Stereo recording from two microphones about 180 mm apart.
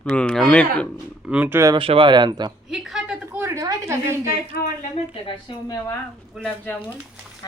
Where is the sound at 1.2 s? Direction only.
10° right (ahead or behind).